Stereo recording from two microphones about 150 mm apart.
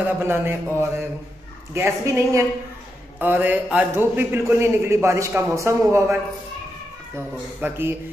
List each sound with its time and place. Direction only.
0.2 s a man's voice: 15° right (ahead or behind)
7.2 s a man's voice: 15° right (ahead or behind)